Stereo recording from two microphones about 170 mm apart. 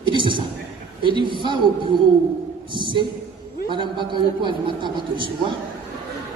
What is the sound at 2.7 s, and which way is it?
Speech, 30° right (ahead or behind).